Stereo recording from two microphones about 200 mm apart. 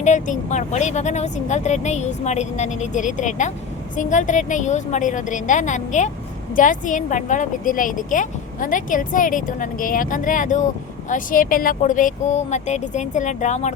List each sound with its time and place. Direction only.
0.0 s a woman's voice: 35° left (ahead or behind)